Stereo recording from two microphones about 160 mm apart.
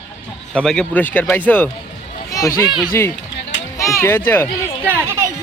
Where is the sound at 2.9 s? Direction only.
15° left (ahead or behind).